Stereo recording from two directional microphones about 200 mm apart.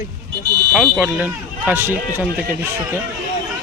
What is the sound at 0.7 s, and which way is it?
Speech, 5° right (ahead or behind).